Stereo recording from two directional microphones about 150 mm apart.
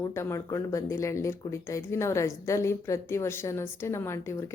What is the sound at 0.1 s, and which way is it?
A woman's voice, 20° left (ahead or behind).